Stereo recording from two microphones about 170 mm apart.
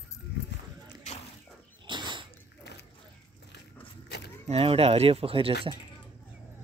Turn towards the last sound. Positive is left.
turn(degrees=-35)  # may be behind; listen again after turning